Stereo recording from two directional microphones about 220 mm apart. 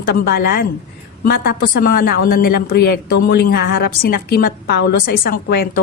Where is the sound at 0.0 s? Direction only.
45° left (ahead or behind).